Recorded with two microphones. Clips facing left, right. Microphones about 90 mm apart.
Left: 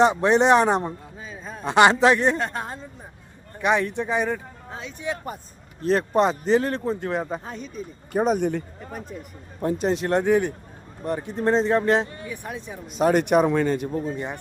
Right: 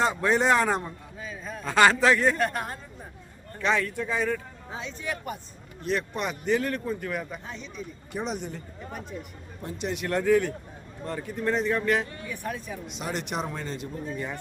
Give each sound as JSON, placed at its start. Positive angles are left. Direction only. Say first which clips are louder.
{"t": 0.0, "sound": "speech", "louder": "left 6 dB", "side_deg": 20}
{"t": 1.6, "sound": "speech", "louder": "left 4 dB", "side_deg": 20}
{"t": 4.7, "sound": "speech", "louder": "even", "side_deg": 0}
{"t": 5.8, "sound": "speech", "louder": "left 9 dB", "side_deg": 35}
{"t": 7.5, "sound": "speech", "louder": "left 4 dB", "side_deg": 45}
{"t": 9.7, "sound": "speech", "louder": "left 5 dB", "side_deg": 35}
{"t": 12.3, "sound": "speech", "louder": "even", "side_deg": 20}
{"t": 12.9, "sound": "speech", "louder": "left 15 dB", "side_deg": 45}
{"t": 14.1, "sound": "speech", "louder": "left 3 dB", "side_deg": 25}